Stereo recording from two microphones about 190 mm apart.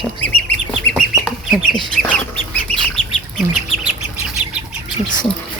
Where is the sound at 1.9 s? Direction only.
5° left (ahead or behind).